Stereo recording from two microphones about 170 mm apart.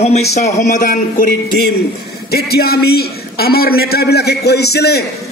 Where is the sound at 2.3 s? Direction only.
65° left (ahead or behind).